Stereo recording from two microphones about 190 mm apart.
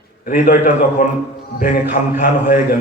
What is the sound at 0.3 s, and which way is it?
A man's voice, 45° left (ahead or behind).